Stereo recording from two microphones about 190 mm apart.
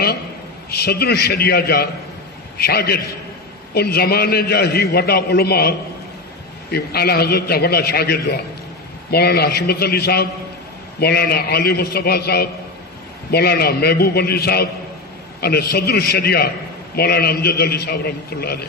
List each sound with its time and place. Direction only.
0.7 s a man's voice: 55° left (ahead or behind)